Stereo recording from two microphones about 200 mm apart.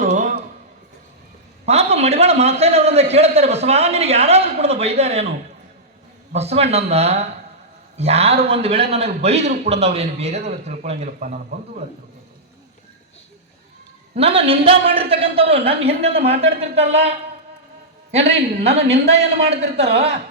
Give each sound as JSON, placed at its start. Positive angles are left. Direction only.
{"t": 0.0, "sound": "a sound", "side_deg": -40}
{"t": 1.6, "sound": "a man's voice", "side_deg": -30}
{"t": 6.3, "sound": "a man's voice", "side_deg": -30}
{"t": 14.2, "sound": "a woman's voice", "side_deg": -30}